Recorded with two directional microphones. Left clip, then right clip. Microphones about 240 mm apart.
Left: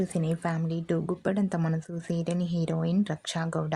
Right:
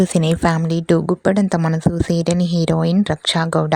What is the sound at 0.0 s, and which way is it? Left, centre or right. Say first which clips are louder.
A woman's voice: right 14 dB; right.